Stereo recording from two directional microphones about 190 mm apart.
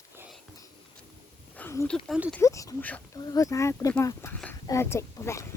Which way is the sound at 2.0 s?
5° right (ahead or behind).